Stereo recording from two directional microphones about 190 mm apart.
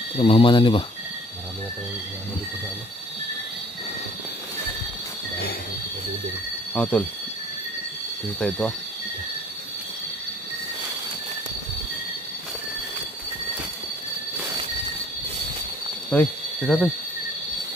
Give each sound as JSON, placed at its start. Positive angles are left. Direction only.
{"t": 0.2, "sound": "speech", "side_deg": 25}
{"t": 6.7, "sound": "speech", "side_deg": 5}
{"t": 8.4, "sound": "speech", "side_deg": 5}
{"t": 16.1, "sound": "speech", "side_deg": 5}